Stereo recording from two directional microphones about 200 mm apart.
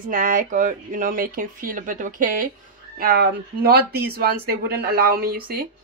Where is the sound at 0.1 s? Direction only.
45° right (ahead or behind).